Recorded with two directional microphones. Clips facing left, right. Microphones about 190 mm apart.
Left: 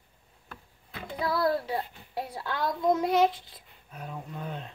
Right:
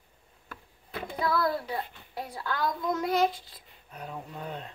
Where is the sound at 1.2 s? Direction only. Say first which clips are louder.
Left 1 dB; 30° left (ahead or behind).